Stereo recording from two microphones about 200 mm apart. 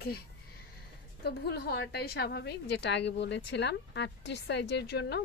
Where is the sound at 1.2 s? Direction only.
55° left (ahead or behind).